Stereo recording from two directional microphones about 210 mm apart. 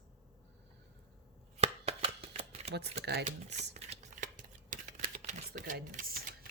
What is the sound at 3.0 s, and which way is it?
Speech, 50° right (ahead or behind).